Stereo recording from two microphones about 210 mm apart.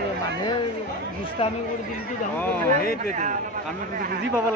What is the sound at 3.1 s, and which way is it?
Speech, 35° right (ahead or behind).